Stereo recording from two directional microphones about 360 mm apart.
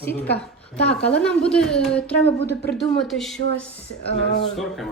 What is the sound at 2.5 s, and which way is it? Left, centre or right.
Speech, left.